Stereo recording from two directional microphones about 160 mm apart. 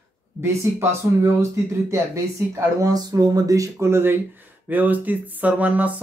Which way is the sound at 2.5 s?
20° right (ahead or behind).